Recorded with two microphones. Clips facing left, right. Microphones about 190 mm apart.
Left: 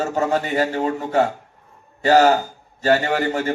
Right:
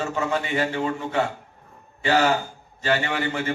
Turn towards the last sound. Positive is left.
turn(degrees=40)  # may be behind; listen again after turning